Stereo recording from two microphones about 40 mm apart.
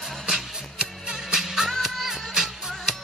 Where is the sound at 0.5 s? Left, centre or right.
Centre.